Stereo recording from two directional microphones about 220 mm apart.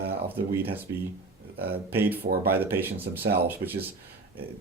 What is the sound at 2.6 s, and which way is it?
Speech, 10° right (ahead or behind).